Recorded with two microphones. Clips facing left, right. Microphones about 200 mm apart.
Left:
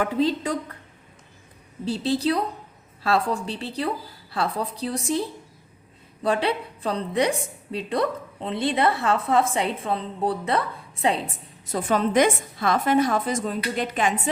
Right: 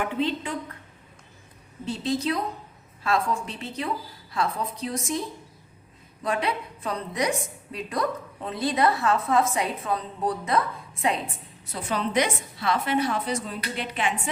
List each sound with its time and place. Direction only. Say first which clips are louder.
0.0 s a woman's voice: left 4 dB; 40° left (ahead or behind)
1.8 s a woman's voice: left 3 dB; 35° left (ahead or behind)
11.6 s a woman's voice: left 6 dB; 45° left (ahead or behind)